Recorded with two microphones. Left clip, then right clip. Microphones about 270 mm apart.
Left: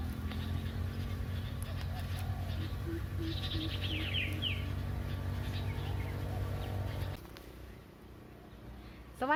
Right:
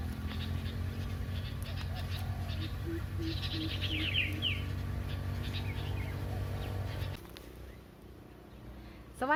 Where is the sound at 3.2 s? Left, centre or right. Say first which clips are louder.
Right 1 dB; right.